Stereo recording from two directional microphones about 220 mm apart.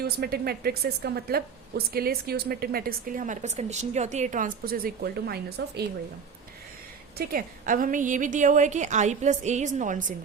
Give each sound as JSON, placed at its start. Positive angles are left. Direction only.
{"t": 0.0, "sound": "a woman's voice", "side_deg": -45}
{"t": 7.2, "sound": "a woman's voice", "side_deg": -40}